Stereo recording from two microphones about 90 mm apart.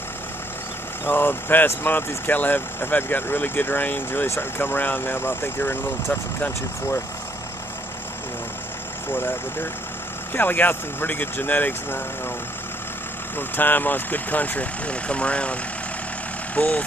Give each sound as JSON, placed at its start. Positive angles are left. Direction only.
{"t": 1.0, "sound": "speech", "side_deg": 25}
{"t": 9.1, "sound": "speech", "side_deg": 25}
{"t": 13.4, "sound": "speech", "side_deg": 20}
{"t": 16.5, "sound": "speech", "side_deg": 15}